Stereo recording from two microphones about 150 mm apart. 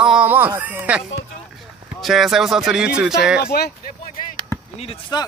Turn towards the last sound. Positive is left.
turn(degrees=30)  # may be behind; listen again after turning